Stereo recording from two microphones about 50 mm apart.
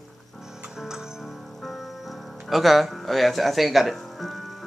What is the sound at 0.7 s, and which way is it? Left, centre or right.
Music, centre.